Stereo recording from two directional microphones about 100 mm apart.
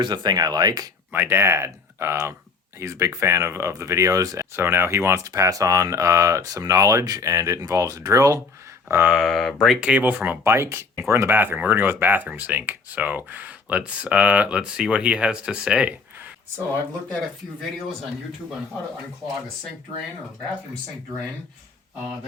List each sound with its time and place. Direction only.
0.0 s speech: 45° right (ahead or behind)
1.1 s speech: 25° right (ahead or behind)
9.0 s speech: 5° right (ahead or behind)
9.8 s speech: 15° right (ahead or behind)